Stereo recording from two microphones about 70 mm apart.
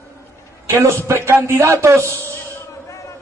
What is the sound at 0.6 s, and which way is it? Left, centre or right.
A man's voice, right.